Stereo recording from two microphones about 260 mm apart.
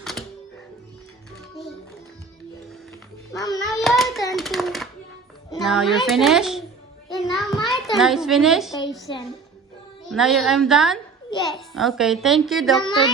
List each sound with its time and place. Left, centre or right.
0.0 s music: centre
3.3 s a child's voice: centre
3.6 s hands: centre
4.4 s a sound: centre
5.5 s a child's voice: centre
7.2 s a sound: centre
9.1 s a child's voice: centre
10.1 s a child's voice: centre